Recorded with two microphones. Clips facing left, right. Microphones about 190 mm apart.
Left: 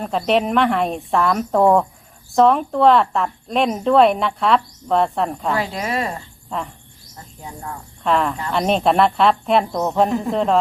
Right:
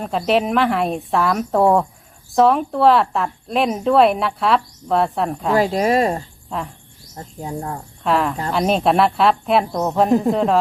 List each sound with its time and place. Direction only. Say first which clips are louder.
0.0 s speech: even; centre (ahead or behind)
5.5 s a woman's voice: right 11 dB; 40° right (ahead or behind)
8.0 s speech: even; centre (ahead or behind)